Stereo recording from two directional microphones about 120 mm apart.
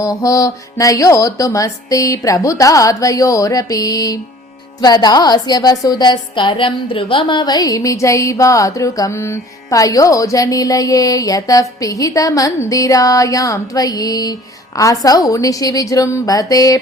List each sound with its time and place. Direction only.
0.0 s a woman's voice: 25° left (ahead or behind)